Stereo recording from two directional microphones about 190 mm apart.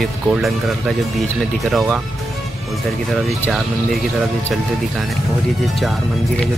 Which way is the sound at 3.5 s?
Centre (ahead or behind).